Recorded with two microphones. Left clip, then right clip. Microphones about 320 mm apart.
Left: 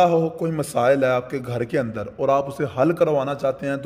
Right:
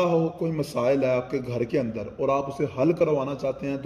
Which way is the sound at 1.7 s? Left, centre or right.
Left.